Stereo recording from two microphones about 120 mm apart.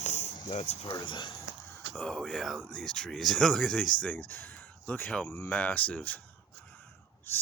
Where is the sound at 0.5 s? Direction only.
70° left (ahead or behind).